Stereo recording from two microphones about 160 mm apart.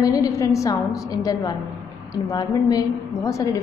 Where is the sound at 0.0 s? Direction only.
20° left (ahead or behind).